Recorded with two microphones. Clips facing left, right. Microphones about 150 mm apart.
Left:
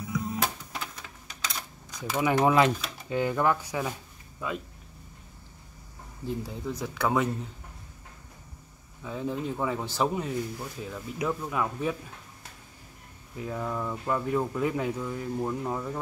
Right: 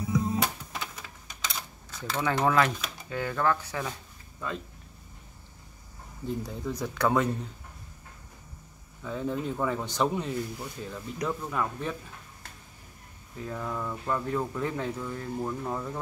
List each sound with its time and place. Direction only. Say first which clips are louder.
0.0 s music: right 4 dB; 25° right (ahead or behind)
1.9 s speech: left 3 dB; 15° left (ahead or behind)
6.2 s speech: even; 5° left (ahead or behind)
9.0 s speech: right 1 dB; 5° left (ahead or behind)
13.4 s speech: left 2 dB; 10° left (ahead or behind)